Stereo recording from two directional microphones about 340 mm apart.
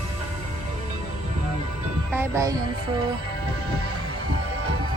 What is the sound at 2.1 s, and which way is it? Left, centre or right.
Speech, centre.